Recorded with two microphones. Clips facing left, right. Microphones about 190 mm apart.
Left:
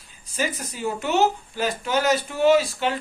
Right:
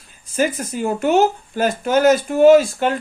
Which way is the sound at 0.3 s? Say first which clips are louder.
Right 8 dB; 50° right (ahead or behind).